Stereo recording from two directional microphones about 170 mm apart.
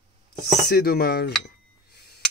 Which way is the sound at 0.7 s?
70° left (ahead or behind).